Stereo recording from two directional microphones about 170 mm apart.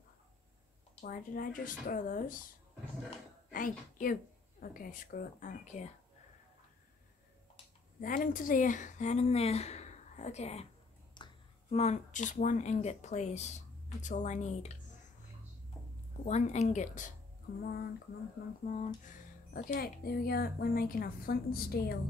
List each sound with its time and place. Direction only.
1.0 s speech: 55° left (ahead or behind)
3.5 s speech: 55° left (ahead or behind)
8.0 s speech: 55° left (ahead or behind)
11.2 s a sound: 25° left (ahead or behind)
11.7 s speech: 40° left (ahead or behind)
16.3 s speech: 40° left (ahead or behind)
17.6 s a woman's voice: 60° left (ahead or behind)
18.6 s speech: 50° left (ahead or behind)
19.0 s a sound: 50° left (ahead or behind)
19.7 s a woman's voice: 65° left (ahead or behind)